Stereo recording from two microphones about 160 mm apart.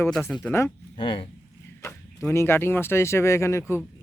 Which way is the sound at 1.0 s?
30° left (ahead or behind).